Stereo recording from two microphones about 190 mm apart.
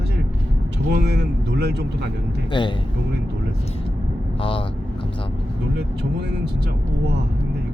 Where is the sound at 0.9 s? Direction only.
60° right (ahead or behind).